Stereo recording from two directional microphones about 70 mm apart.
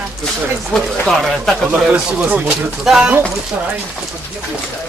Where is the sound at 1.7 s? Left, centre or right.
Centre.